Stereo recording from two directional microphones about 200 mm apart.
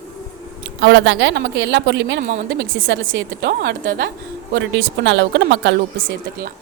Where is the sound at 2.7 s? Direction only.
75° right (ahead or behind).